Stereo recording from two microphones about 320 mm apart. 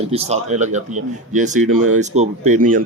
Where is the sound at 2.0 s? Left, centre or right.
Right.